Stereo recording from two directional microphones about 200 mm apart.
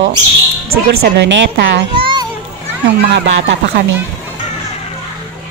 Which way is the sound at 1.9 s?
25° right (ahead or behind).